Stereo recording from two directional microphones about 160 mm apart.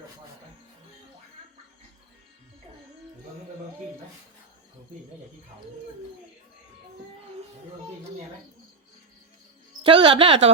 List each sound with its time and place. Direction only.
9.8 s a woman's voice: 35° right (ahead or behind)